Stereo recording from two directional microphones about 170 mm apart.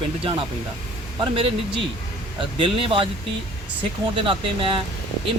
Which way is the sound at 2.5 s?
30° right (ahead or behind).